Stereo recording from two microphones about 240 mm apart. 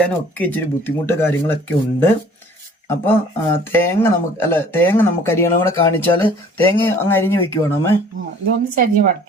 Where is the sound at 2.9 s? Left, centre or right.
Centre.